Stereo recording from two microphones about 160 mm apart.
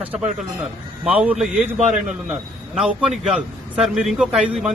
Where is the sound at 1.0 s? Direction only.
5° right (ahead or behind).